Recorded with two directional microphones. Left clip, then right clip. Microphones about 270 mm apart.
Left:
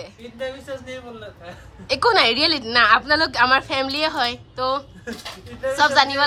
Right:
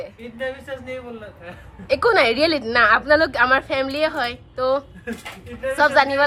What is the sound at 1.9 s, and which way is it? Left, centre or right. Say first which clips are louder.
A woman's voice: even; centre.